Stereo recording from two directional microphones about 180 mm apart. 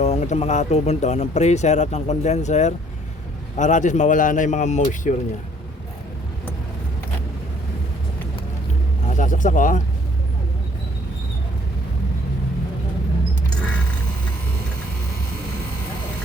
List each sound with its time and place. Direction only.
0.0 s speech: 40° left (ahead or behind)
9.0 s speech: 45° left (ahead or behind)